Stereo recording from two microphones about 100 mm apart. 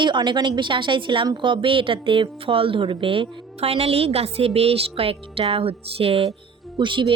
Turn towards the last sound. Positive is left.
turn(degrees=-55)  # may be behind; listen again after turning